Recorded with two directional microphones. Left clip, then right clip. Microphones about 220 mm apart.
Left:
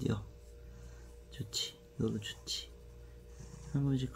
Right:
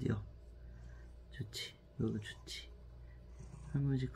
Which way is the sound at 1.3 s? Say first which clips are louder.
Left 7 dB; 20° left (ahead or behind).